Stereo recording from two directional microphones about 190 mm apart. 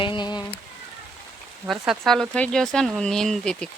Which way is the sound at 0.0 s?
25° left (ahead or behind).